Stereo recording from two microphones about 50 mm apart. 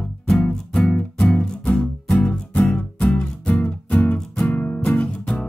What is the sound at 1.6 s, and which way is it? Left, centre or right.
Music, left.